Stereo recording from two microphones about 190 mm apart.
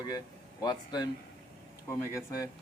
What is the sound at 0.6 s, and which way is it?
A man's voice, 20° left (ahead or behind).